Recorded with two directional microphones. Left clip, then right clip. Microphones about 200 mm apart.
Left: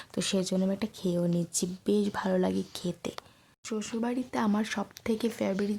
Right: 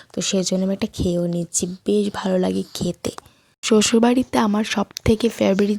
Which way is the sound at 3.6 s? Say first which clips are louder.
Right 18 dB; 45° right (ahead or behind).